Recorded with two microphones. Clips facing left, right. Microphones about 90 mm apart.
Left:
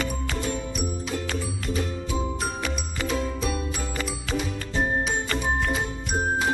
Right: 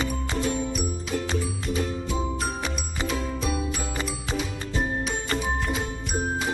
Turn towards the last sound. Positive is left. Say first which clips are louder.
# left 2 dB
turn(degrees=0)  # may be behind; listen again after turning